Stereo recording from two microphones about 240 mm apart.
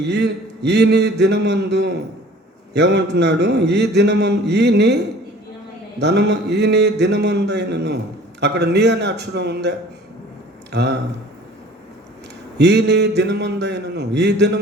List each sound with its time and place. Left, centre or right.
0.0 s a man's voice: right
6.0 s a man's voice: right
12.5 s a man's voice: right